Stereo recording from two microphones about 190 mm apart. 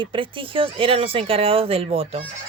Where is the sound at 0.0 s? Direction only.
25° right (ahead or behind).